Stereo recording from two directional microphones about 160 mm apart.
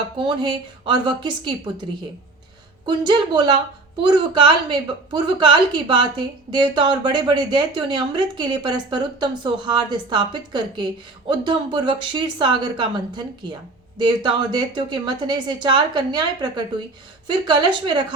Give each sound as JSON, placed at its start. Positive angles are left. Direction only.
{"t": 0.2, "sound": "a woman's voice", "side_deg": -30}
{"t": 2.8, "sound": "a woman's voice", "side_deg": -30}